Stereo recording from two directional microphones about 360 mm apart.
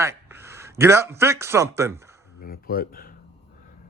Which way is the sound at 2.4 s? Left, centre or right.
Left.